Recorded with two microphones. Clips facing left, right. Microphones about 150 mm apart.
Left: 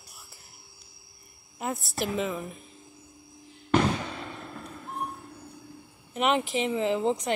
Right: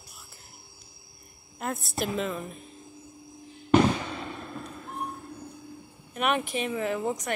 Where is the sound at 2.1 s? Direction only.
15° left (ahead or behind).